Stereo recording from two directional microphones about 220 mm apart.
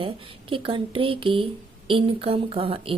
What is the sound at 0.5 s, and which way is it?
Speech, 25° right (ahead or behind).